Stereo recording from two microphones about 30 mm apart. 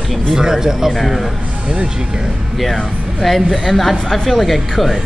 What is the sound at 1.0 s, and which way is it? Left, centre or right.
Speech, centre.